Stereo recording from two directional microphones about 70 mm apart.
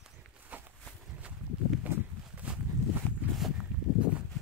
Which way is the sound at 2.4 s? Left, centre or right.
Centre.